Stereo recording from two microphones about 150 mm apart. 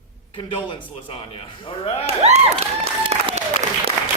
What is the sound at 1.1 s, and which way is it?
Speech, 40° left (ahead or behind).